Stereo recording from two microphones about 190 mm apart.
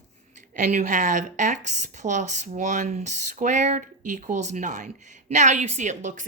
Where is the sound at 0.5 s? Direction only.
40° right (ahead or behind).